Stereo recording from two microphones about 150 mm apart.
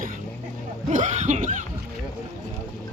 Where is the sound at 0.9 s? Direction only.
55° right (ahead or behind).